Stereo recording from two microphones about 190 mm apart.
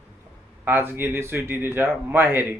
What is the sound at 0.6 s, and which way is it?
Speech, 10° right (ahead or behind).